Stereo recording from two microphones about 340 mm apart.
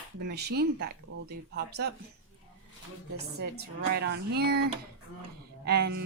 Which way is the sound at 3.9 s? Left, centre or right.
Right.